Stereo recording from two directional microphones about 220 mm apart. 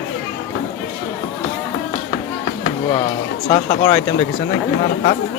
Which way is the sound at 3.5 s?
25° left (ahead or behind).